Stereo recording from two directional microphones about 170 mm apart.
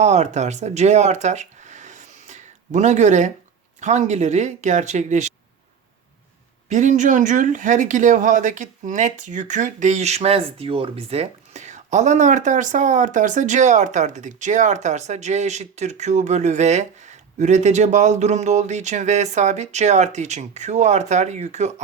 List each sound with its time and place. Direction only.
0.0 s speech: 40° right (ahead or behind)
6.7 s speech: 45° right (ahead or behind)